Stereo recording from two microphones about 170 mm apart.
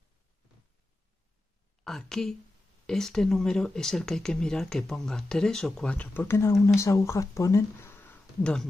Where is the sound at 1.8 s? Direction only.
5° left (ahead or behind).